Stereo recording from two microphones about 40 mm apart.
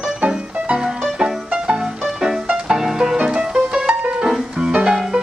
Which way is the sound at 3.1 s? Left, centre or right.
Right.